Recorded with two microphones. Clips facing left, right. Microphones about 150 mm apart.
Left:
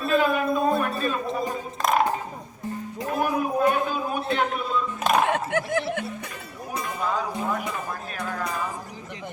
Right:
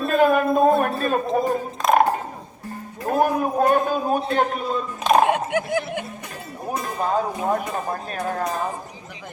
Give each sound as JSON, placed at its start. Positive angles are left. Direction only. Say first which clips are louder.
{"t": 0.1, "sound": "music", "louder": "right 4 dB", "side_deg": -50}
{"t": 1.8, "sound": "music", "louder": "right 5 dB", "side_deg": 0}
{"t": 3.1, "sound": "a sound", "louder": "right 5 dB", "side_deg": -45}
{"t": 5.3, "sound": "snicker", "louder": "right 3 dB", "side_deg": -15}
{"t": 6.8, "sound": "music", "louder": "right 4 dB", "side_deg": -40}
{"t": 8.3, "sound": "a sound", "louder": "right 5 dB", "side_deg": -40}